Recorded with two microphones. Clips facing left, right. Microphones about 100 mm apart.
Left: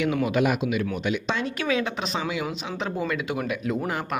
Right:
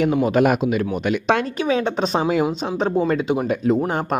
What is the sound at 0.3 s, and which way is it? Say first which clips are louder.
Speech: right 6 dB; 45° right (ahead or behind).